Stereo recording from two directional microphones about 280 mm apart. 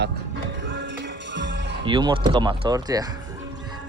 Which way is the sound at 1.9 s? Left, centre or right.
Centre.